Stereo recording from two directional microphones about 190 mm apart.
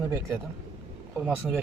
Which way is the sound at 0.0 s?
15° right (ahead or behind).